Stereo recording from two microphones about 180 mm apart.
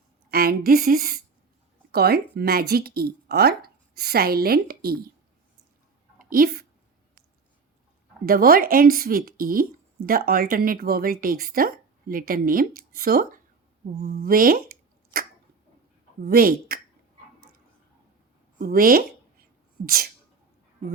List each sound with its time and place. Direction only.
0.3 s a woman's voice: 55° right (ahead or behind)
6.3 s speech: 55° right (ahead or behind)
8.3 s speech: 55° right (ahead or behind)
18.6 s speech: 55° right (ahead or behind)